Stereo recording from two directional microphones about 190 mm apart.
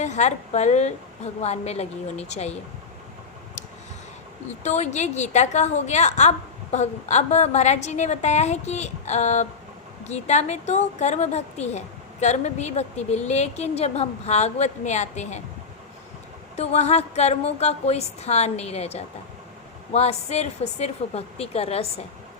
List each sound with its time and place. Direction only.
0.0 s a woman's voice: 40° left (ahead or behind)
4.6 s a woman's voice: 35° left (ahead or behind)
16.6 s a woman's voice: 35° left (ahead or behind)